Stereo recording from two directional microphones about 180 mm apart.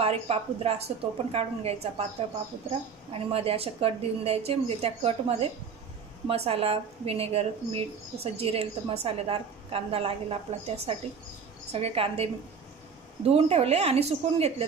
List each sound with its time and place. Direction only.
0.0 s speech: 35° right (ahead or behind)
3.1 s speech: 35° right (ahead or behind)